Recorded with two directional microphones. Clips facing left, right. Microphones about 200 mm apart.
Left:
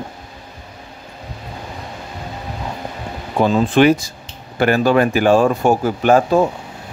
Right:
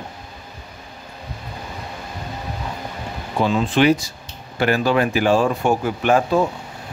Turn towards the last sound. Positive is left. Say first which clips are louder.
# left 4 dB
turn(degrees=40)  # may be behind; listen again after turning